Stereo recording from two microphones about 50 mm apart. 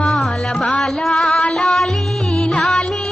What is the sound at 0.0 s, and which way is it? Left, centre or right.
Music, centre.